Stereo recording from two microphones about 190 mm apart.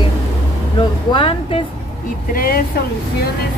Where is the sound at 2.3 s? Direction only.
50° left (ahead or behind).